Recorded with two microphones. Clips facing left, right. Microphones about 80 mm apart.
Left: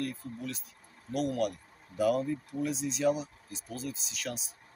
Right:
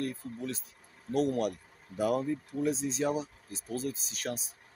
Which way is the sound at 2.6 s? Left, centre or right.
Right.